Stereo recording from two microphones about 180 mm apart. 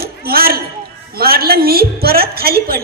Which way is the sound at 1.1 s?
60° right (ahead or behind).